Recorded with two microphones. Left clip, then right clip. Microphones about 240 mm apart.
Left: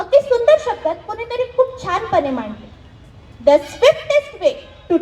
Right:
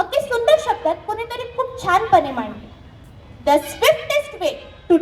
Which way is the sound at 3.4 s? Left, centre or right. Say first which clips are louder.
Left 4 dB; right.